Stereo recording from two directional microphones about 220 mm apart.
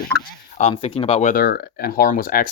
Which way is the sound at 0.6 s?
25° left (ahead or behind).